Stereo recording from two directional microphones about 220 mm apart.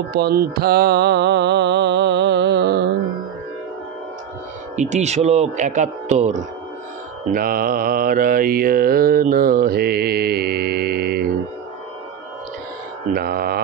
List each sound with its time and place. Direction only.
0.1 s music: 45° right (ahead or behind)
4.7 s mantra: 30° right (ahead or behind)
7.3 s mantra: 40° right (ahead or behind)
13.1 s music: 45° right (ahead or behind)